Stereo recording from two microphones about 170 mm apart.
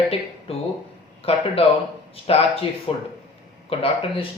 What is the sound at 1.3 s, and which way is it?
Speech, 35° left (ahead or behind).